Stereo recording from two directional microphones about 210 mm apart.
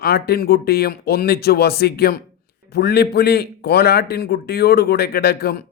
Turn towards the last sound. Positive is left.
turn(degrees=50)  # may be behind; listen again after turning